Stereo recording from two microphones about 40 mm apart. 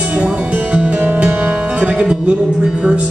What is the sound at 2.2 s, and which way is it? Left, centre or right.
Speech, right.